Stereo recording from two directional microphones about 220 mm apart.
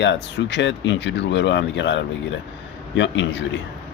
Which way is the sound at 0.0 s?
55° left (ahead or behind).